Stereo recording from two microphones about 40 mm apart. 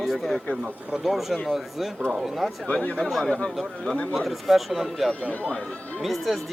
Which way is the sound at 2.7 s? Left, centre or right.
Left.